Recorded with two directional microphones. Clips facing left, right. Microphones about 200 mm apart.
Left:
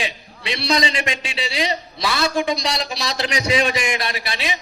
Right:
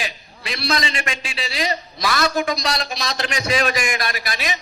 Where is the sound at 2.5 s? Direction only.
30° left (ahead or behind).